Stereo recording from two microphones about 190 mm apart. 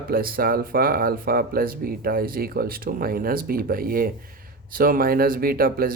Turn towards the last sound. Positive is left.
turn(degrees=-50)  # may be behind; listen again after turning